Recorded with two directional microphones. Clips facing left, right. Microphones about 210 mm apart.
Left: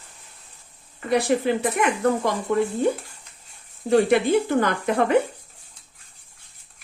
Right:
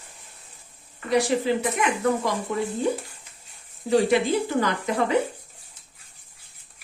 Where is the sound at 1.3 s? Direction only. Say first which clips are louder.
Left 3 dB; 55° left (ahead or behind).